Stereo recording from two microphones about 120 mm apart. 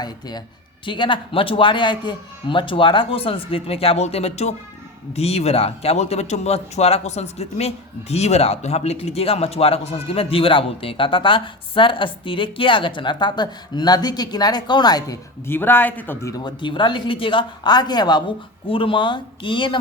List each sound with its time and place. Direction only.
0.0 s speech: 35° left (ahead or behind); by 16.1 s 15° left (ahead or behind)
16.2 s speech: 35° left (ahead or behind)